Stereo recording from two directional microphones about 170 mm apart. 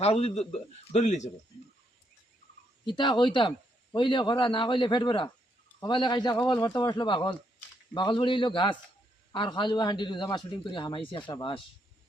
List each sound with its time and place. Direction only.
0.0 s speech: 40° left (ahead or behind)
2.8 s a man's voice: 25° left (ahead or behind)